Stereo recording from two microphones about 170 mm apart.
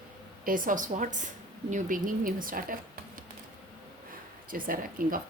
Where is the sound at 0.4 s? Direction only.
50° right (ahead or behind).